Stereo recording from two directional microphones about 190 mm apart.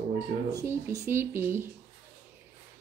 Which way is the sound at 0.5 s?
15° right (ahead or behind).